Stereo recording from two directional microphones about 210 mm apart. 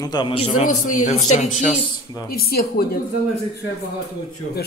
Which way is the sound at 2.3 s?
45° left (ahead or behind).